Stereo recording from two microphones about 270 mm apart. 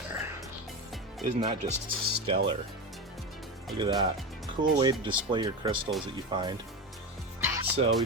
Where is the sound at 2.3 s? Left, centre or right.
Right.